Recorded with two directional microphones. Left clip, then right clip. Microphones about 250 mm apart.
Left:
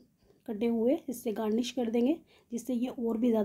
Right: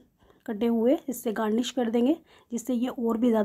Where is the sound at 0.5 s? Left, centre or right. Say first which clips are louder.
Right 5 dB; centre.